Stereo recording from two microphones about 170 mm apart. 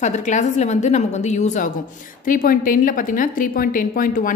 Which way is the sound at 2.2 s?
55° left (ahead or behind).